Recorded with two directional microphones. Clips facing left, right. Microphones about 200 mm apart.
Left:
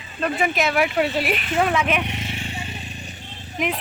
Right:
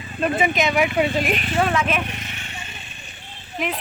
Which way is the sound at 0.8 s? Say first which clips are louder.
Right 1 dB; 50° right (ahead or behind).